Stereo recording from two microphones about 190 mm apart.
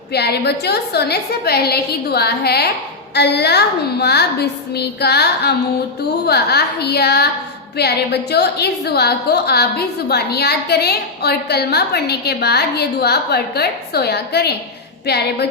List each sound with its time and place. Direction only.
0.1 s a woman's voice: 60° left (ahead or behind)